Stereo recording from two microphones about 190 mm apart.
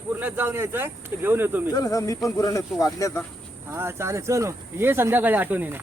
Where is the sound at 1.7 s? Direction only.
20° left (ahead or behind).